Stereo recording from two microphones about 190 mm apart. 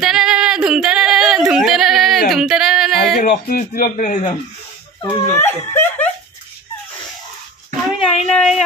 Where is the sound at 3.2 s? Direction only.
50° left (ahead or behind).